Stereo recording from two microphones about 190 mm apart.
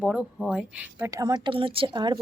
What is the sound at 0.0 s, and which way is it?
Speech, 5° right (ahead or behind).